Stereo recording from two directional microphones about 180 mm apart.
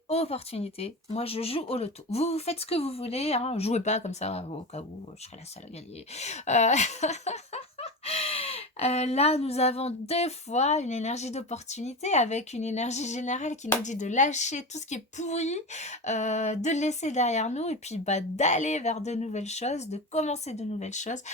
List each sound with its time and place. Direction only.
0.1 s speech: 35° left (ahead or behind)
6.1 s speech: 40° left (ahead or behind)